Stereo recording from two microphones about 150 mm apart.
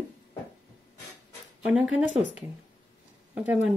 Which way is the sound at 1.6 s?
10° right (ahead or behind).